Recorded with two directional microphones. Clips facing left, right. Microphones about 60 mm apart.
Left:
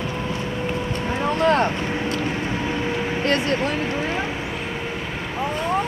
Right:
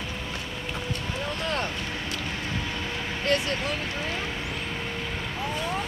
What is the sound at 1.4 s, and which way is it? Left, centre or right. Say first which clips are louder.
Vehicle: left 13 dB; left.